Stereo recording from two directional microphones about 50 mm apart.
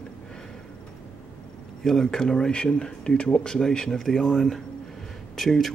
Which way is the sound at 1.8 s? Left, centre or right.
Centre.